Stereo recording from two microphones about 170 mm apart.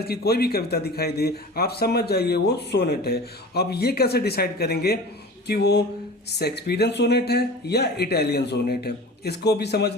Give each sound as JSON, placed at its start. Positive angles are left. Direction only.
{"t": 0.0, "sound": "a man's voice", "side_deg": 65}